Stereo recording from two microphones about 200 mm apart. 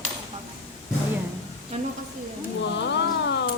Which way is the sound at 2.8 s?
60° left (ahead or behind).